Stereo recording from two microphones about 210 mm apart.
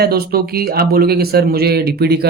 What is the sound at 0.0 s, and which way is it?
Speech, 45° right (ahead or behind).